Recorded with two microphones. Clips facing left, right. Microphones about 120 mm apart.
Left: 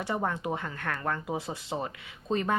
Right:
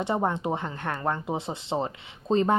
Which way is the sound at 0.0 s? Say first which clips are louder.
Right 4 dB; 25° right (ahead or behind).